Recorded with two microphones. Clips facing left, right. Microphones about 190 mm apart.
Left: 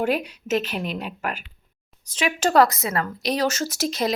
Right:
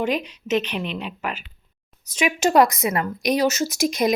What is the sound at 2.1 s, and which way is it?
Speech, 10° right (ahead or behind).